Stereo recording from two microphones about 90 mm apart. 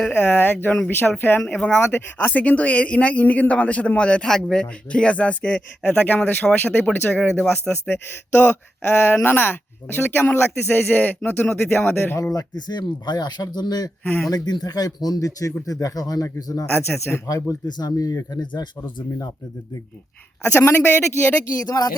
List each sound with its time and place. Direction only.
0.1 s speech: 20° left (ahead or behind)
1.4 s speech: 10° left (ahead or behind)
12.1 s speech: 40° left (ahead or behind)
17.7 s speech: 50° left (ahead or behind)
20.4 s speech: 25° left (ahead or behind)
21.6 s speech: 45° left (ahead or behind)